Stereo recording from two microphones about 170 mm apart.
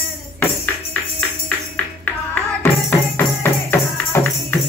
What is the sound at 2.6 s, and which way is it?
Music, 15° left (ahead or behind).